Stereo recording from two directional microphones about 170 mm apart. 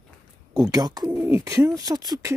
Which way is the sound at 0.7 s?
20° right (ahead or behind).